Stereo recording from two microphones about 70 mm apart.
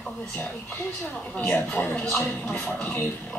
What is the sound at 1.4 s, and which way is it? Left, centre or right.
A woman's voice, centre.